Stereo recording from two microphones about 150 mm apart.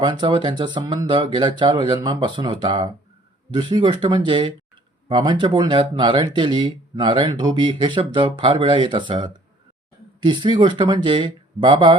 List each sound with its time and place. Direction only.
0.0 s speech: 30° right (ahead or behind)